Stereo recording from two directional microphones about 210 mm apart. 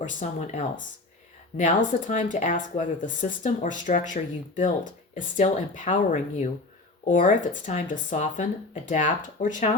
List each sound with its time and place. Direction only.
0.0 s speech: 35° left (ahead or behind)